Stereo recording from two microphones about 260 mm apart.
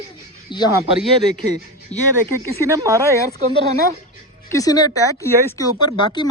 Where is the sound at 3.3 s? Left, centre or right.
Right.